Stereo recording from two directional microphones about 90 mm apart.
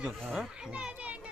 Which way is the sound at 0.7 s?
15° right (ahead or behind).